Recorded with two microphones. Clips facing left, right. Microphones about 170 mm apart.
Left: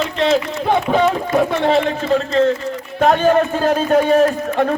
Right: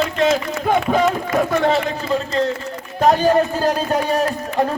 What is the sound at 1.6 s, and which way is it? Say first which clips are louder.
A man's voice: left 2 dB; 40° right (ahead or behind).